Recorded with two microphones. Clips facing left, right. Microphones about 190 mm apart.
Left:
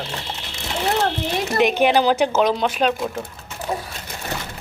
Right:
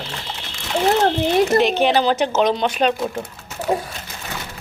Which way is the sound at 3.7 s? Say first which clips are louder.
Right 6 dB; 15° right (ahead or behind).